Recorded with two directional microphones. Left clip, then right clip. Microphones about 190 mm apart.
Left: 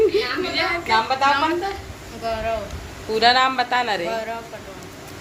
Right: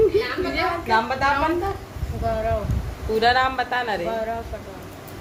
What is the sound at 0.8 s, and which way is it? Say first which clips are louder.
Speech: left 2 dB; 5° left (ahead or behind).